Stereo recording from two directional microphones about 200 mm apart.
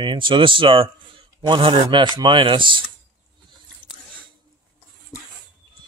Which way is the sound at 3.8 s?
5° left (ahead or behind).